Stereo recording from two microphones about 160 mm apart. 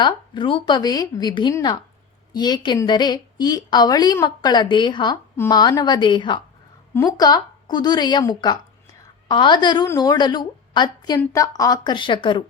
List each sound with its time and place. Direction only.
0.0 s a woman's voice: 30° left (ahead or behind)